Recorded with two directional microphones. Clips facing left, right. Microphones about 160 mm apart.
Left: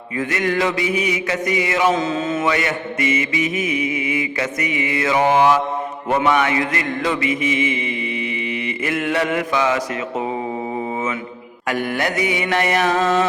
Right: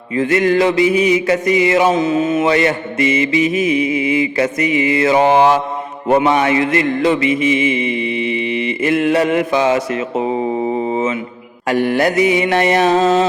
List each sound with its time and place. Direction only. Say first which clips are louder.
0.2 s a man's voice: right 7 dB; 30° right (ahead or behind)
2.5 s a man's voice: right 6 dB; 30° right (ahead or behind)
10.7 s mantra: right 6 dB; 25° right (ahead or behind)
11.7 s a man's voice: right 7 dB; 30° right (ahead or behind)